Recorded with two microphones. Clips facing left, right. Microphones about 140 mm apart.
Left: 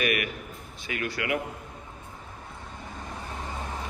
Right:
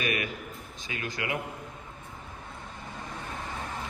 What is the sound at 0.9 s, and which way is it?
Speech, 25° right (ahead or behind).